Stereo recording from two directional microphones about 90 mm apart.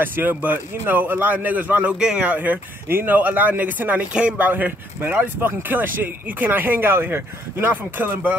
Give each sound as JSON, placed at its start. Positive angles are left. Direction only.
{"t": 0.0, "sound": "speech", "side_deg": -20}